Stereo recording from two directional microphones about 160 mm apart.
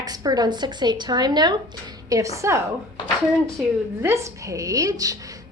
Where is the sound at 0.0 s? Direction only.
25° right (ahead or behind).